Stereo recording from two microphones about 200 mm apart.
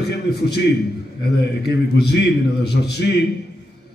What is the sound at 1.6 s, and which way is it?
A man's voice, 55° left (ahead or behind).